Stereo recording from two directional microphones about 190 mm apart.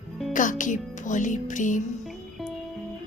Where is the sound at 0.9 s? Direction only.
40° left (ahead or behind).